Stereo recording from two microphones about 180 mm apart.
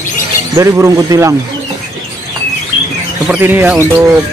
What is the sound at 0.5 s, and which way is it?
Speech, 15° right (ahead or behind).